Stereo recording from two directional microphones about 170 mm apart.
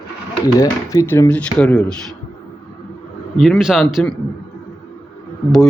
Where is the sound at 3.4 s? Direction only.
Centre (ahead or behind).